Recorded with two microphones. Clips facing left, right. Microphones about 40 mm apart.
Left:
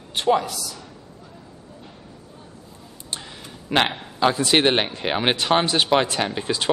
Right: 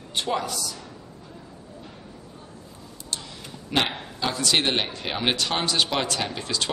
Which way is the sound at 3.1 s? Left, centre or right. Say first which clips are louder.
Left 1 dB; left.